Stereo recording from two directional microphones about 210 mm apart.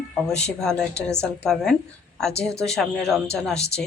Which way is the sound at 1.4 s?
Centre (ahead or behind).